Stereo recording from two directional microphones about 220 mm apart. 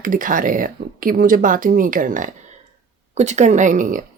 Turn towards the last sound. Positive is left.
turn(degrees=-35)  # may be behind; listen again after turning